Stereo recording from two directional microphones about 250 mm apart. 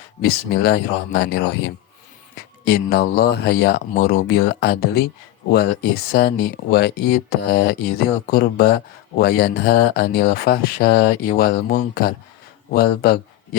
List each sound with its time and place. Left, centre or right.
0.2 s a man's voice: left